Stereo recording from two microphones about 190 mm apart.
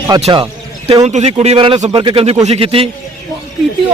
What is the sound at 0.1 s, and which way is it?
Speech, 20° right (ahead or behind).